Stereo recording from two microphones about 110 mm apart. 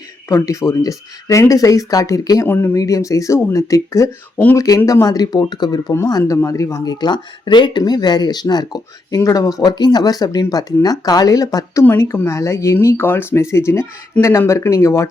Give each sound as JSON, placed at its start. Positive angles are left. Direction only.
{"t": 0.3, "sound": "speech", "side_deg": 30}
{"t": 2.5, "sound": "speech", "side_deg": 20}
{"t": 2.7, "sound": "speech", "side_deg": 30}
{"t": 5.9, "sound": "speech", "side_deg": 30}